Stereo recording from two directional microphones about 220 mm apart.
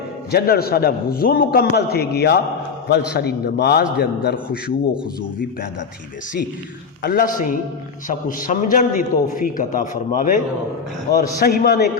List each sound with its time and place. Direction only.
0.3 s a man's voice: 45° left (ahead or behind)
7.0 s a man's voice: 40° left (ahead or behind)